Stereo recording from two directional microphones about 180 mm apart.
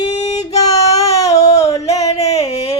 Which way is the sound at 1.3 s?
40° left (ahead or behind).